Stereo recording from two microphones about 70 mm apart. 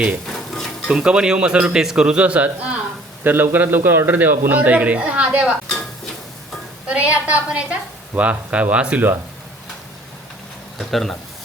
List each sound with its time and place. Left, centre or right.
0.3 s cutlery: centre
0.9 s a man's voice: centre
6.8 s a man's voice: centre
10.8 s speech: centre